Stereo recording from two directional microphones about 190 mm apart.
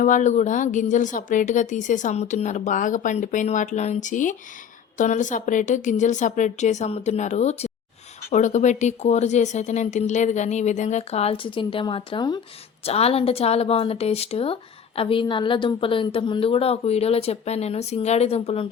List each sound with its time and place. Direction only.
0.0 s speech: 40° left (ahead or behind)